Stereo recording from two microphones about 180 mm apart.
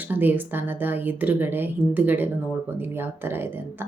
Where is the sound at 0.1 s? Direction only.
10° right (ahead or behind).